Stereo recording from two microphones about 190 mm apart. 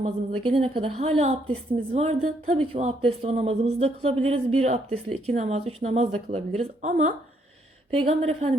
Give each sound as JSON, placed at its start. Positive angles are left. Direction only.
{"t": 0.0, "sound": "speech", "side_deg": -30}